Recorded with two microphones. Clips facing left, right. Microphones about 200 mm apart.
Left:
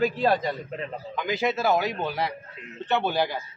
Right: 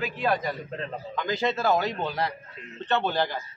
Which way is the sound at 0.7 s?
15° left (ahead or behind).